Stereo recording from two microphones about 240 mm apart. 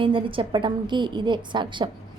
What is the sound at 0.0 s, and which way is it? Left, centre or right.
A woman's voice, right.